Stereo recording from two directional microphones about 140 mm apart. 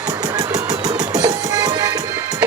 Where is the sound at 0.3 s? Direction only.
25° right (ahead or behind).